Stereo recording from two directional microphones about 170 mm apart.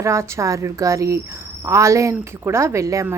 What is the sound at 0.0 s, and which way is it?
A woman's voice, 15° right (ahead or behind).